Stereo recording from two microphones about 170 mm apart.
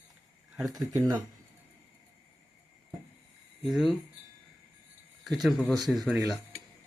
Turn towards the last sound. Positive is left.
turn(degrees=0)  # may be behind; listen again after turning